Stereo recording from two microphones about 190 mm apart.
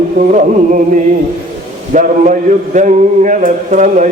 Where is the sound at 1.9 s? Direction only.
40° right (ahead or behind).